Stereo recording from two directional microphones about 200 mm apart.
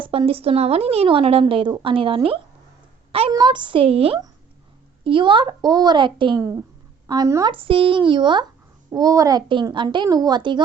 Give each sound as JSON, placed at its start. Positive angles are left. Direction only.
{"t": 0.0, "sound": "speech", "side_deg": -25}